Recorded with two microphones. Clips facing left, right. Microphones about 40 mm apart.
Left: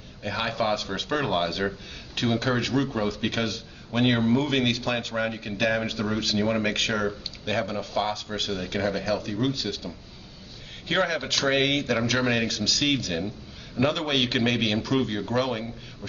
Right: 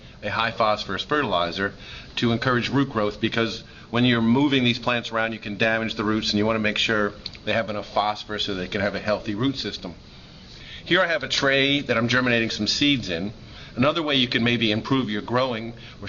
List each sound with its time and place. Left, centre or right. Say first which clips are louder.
0.2 s a man's voice: right 4 dB; right